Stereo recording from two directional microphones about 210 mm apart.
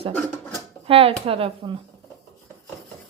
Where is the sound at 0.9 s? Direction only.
25° right (ahead or behind).